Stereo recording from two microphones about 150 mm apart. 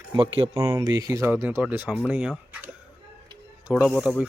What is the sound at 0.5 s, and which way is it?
A man's voice, 20° right (ahead or behind).